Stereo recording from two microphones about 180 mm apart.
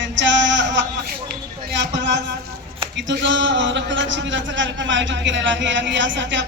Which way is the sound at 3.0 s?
90° right.